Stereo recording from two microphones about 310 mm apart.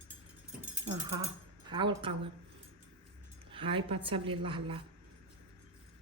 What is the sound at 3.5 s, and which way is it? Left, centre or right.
Speech, centre.